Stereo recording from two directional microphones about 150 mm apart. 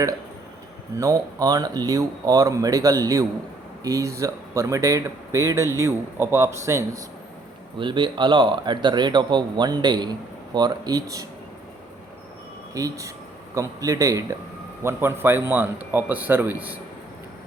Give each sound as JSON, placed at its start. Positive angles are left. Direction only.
{"t": 0.9, "sound": "speech", "side_deg": -25}
{"t": 7.8, "sound": "speech", "side_deg": -30}
{"t": 12.7, "sound": "a man's voice", "side_deg": -25}